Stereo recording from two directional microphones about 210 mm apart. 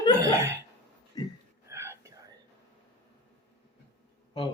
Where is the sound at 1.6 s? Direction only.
10° right (ahead or behind).